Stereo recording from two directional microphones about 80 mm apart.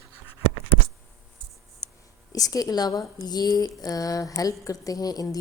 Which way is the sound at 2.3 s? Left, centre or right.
Left.